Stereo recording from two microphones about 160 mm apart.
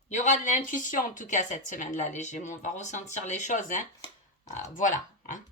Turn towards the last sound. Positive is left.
turn(degrees=55)  # may be behind; listen again after turning